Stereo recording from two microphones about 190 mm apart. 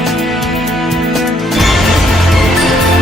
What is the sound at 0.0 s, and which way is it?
Music, centre (ahead or behind).